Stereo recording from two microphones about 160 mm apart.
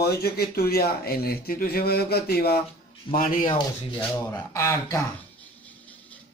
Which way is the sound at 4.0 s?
15° left (ahead or behind).